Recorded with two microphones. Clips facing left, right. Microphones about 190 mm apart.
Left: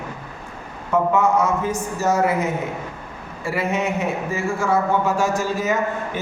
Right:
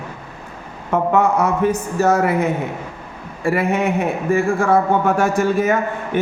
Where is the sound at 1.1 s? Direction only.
60° right (ahead or behind).